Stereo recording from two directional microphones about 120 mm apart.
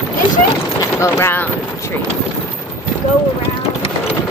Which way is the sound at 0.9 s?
25° left (ahead or behind).